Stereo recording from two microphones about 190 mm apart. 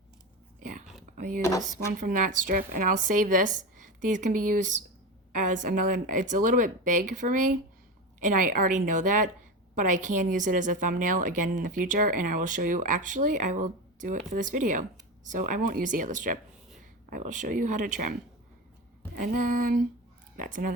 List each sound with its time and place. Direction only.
0.6 s whispering: 45° right (ahead or behind)
1.1 s a sound: 45° right (ahead or behind)
1.4 s speech: 15° left (ahead or behind)
1.9 s a woman's voice: 45° right (ahead or behind)